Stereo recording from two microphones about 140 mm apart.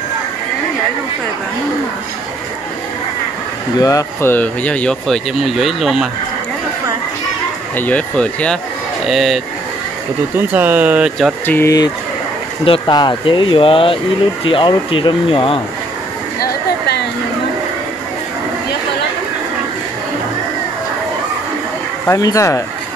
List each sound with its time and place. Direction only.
3.7 s speech: 25° left (ahead or behind); by 6.0 s centre (ahead or behind)
7.7 s speech: 10° left (ahead or behind)
10.5 s speech: 15° right (ahead or behind)
11.4 s speech: 15° left (ahead or behind)
12.6 s speech: 35° left (ahead or behind)
22.0 s speech: 25° left (ahead or behind)